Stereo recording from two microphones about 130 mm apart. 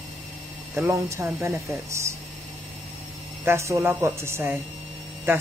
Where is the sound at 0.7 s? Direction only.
20° right (ahead or behind).